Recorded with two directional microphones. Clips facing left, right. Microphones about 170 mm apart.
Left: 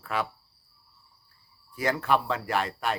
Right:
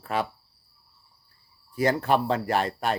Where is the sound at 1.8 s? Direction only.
35° right (ahead or behind).